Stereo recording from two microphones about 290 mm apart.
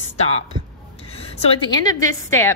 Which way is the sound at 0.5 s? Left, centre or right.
Centre.